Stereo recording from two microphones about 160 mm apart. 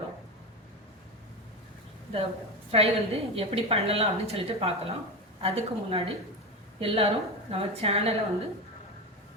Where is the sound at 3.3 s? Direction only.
40° right (ahead or behind).